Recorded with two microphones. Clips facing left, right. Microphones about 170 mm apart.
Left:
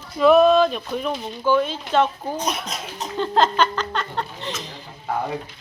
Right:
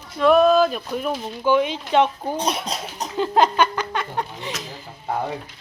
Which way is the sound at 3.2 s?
10° right (ahead or behind).